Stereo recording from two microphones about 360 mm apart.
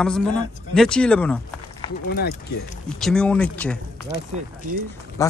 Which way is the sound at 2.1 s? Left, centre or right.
Left.